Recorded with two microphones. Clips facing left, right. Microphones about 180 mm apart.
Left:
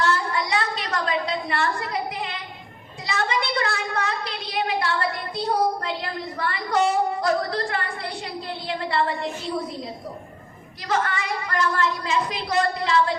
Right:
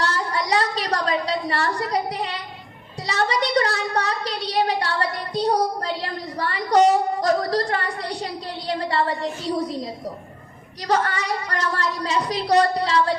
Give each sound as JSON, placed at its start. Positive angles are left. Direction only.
{"t": 0.0, "sound": "a sound", "side_deg": -40}
{"t": 3.1, "sound": "a woman's voice", "side_deg": -40}
{"t": 10.8, "sound": "a woman's voice", "side_deg": -40}